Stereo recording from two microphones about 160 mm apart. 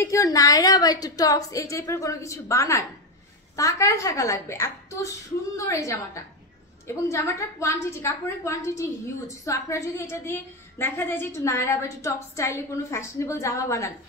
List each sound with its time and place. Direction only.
0.0 s a woman's voice: 20° left (ahead or behind)